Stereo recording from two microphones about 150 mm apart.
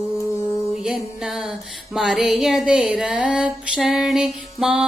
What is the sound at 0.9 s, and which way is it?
Music, 5° right (ahead or behind).